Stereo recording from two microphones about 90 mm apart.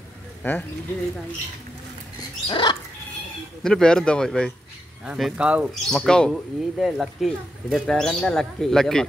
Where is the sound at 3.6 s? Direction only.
10° left (ahead or behind).